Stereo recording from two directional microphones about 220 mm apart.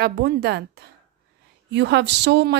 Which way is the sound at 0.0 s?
45° right (ahead or behind).